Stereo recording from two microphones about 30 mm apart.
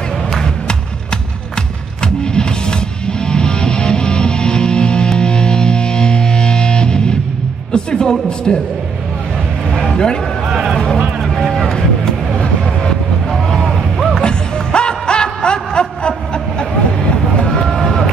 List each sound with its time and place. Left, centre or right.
3.1 s music: left
7.7 s a sound: left
9.8 s music: left
11.2 s vehicle: centre
14.2 s music: left
17.5 s run: centre